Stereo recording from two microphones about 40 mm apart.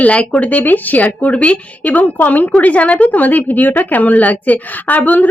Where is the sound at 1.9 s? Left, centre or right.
Left.